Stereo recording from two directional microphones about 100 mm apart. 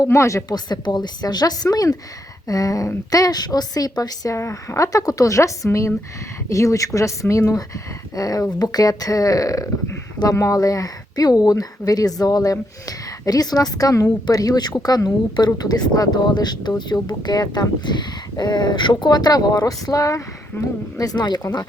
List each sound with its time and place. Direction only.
0.0 s a woman's voice: 30° left (ahead or behind)
0.5 s a woman's voice: 45° left (ahead or behind)